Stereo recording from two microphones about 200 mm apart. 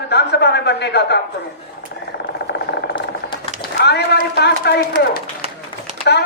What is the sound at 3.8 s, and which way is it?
A man's voice, 55° left (ahead or behind).